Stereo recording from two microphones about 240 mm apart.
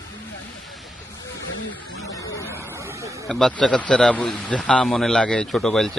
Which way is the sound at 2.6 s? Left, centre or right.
Centre.